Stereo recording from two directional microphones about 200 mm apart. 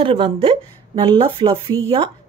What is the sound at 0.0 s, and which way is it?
A woman's voice, 25° right (ahead or behind).